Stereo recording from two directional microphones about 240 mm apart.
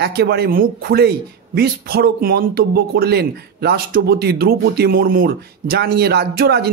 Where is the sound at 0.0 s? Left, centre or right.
Right.